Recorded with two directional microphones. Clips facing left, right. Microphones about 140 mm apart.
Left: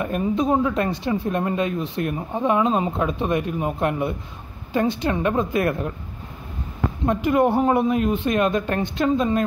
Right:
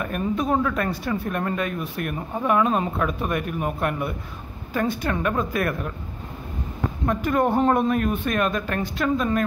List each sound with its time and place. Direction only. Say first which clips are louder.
0.0 s speech: left 3 dB; 20° left (ahead or behind)
4.7 s speech: left 3 dB; 20° left (ahead or behind)
7.1 s speech: left 3 dB; 15° left (ahead or behind)